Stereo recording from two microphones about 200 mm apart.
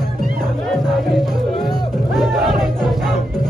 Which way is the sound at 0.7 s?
Centre (ahead or behind).